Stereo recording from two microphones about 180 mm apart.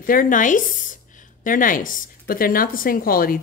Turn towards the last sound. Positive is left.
turn(degrees=55)  # may be behind; listen again after turning